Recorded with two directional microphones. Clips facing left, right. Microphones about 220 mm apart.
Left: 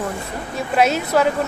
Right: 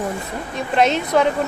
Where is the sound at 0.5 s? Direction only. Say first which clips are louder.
Even; 5° left (ahead or behind).